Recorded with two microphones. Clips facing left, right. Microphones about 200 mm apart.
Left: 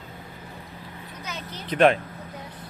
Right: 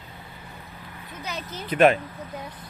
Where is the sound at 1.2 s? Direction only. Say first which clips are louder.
Right 3 dB; 35° right (ahead or behind).